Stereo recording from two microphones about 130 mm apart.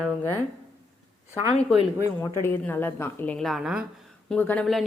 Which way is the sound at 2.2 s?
15° left (ahead or behind).